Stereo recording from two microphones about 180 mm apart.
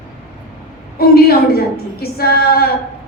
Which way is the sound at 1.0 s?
60° left (ahead or behind).